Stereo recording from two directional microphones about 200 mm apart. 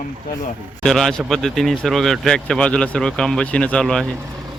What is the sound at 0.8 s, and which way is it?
Speech, centre (ahead or behind).